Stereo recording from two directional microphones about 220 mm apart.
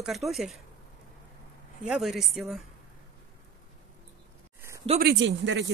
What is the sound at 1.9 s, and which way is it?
Speech, centre (ahead or behind).